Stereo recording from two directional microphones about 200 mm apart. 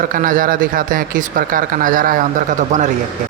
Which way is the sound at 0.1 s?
45° right (ahead or behind).